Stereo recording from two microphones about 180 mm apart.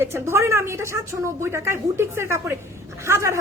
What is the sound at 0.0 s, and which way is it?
A woman's voice, 15° right (ahead or behind).